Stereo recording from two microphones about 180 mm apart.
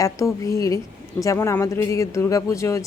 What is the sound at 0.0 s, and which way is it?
Speech, 15° left (ahead or behind).